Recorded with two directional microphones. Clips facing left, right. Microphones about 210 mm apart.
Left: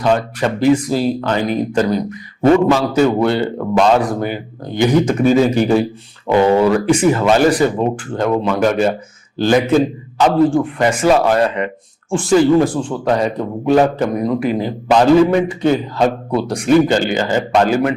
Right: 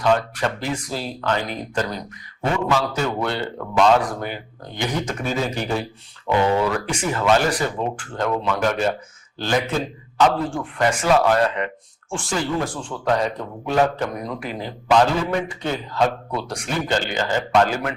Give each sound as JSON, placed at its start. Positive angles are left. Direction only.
{"t": 0.0, "sound": "a man's voice", "side_deg": 10}
{"t": 2.4, "sound": "speech", "side_deg": 40}
{"t": 2.8, "sound": "a man's voice", "side_deg": 10}
{"t": 6.2, "sound": "speech", "side_deg": 40}
{"t": 6.7, "sound": "a man's voice", "side_deg": 5}